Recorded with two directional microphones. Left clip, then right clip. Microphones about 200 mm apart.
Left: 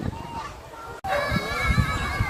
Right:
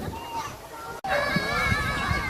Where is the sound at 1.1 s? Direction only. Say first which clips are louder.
Even; 60° left (ahead or behind).